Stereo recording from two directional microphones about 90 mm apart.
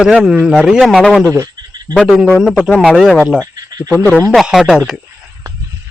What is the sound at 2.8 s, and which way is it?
Speech, centre (ahead or behind).